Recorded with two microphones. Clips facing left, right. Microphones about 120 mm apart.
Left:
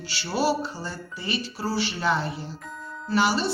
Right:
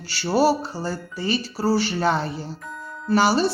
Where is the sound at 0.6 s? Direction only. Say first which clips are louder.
Right 5 dB; 30° right (ahead or behind).